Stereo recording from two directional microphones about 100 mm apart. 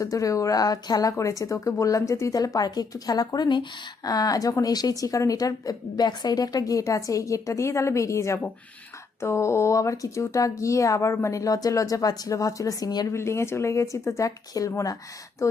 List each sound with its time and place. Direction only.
0.0 s speech: 35° left (ahead or behind)
13.1 s speech: 25° left (ahead or behind)